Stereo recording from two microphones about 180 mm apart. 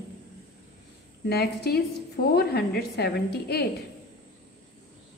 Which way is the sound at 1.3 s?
60° left (ahead or behind).